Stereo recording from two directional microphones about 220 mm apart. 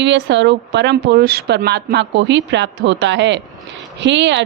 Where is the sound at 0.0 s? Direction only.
55° right (ahead or behind).